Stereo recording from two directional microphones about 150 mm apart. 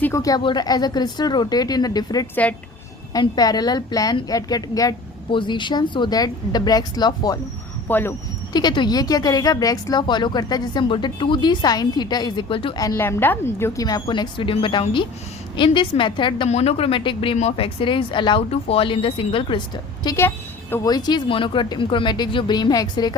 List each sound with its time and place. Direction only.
0.0 s speech: 20° left (ahead or behind)
2.3 s a woman's voice: 10° left (ahead or behind)
3.1 s speech: 25° left (ahead or behind)
7.9 s a woman's voice: 10° left (ahead or behind)
8.5 s speech: 30° left (ahead or behind)
13.0 s a woman's voice: 15° left (ahead or behind)
13.8 s speech: 30° left (ahead or behind)
16.5 s speech: 45° left (ahead or behind)
20.1 s a woman's voice: 15° left (ahead or behind)
20.8 s speech: 25° left (ahead or behind)